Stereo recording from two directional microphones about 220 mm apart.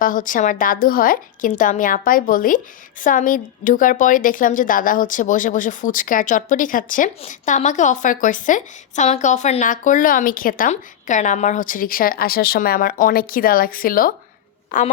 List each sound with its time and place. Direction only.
0.0 s a woman's voice: 40° left (ahead or behind)